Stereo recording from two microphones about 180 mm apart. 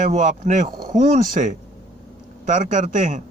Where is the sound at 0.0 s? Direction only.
45° right (ahead or behind).